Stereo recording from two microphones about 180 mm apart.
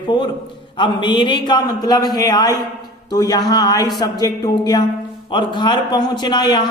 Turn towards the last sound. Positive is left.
turn(degrees=25)  # may be behind; listen again after turning